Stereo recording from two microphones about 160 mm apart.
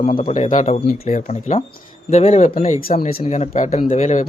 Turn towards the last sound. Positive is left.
turn(degrees=45)  # may be behind; listen again after turning